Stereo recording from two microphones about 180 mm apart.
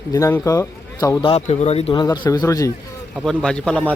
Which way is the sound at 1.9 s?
25° left (ahead or behind).